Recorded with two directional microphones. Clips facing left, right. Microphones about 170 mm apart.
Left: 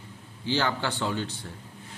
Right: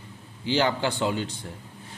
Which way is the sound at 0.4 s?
15° right (ahead or behind).